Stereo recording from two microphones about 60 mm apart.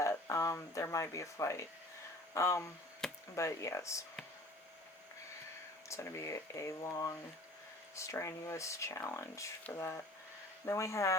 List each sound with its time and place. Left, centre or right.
0.0 s a sound: left
0.5 s speech: left
5.9 s speech: left
6.9 s speech: left
7.9 s speech: left
9.7 s speech: left
10.7 s speech: left